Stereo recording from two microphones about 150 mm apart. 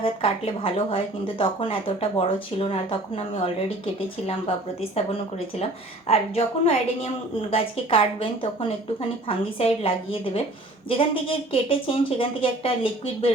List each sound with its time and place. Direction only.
0.0 s speech: 35° left (ahead or behind)
4.8 s a woman's voice: 45° left (ahead or behind)